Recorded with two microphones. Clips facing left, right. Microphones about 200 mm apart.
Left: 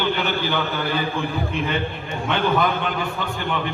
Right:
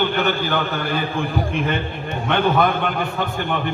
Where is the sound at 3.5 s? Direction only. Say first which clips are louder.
Right 2 dB; 50° right (ahead or behind).